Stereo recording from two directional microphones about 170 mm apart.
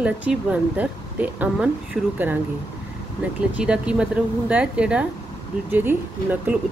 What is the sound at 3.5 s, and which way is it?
Speech, 5° right (ahead or behind).